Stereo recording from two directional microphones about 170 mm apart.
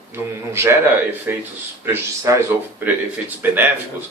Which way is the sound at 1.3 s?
10° right (ahead or behind).